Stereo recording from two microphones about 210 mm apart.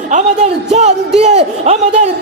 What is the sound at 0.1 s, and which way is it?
A man's voice, 35° right (ahead or behind).